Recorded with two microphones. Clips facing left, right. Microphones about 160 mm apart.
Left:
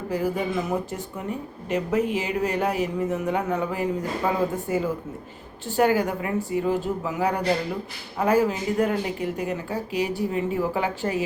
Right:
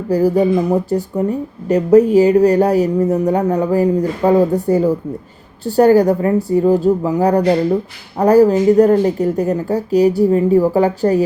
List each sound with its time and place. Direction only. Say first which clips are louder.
0.1 s speech: right 13 dB; 40° right (ahead or behind)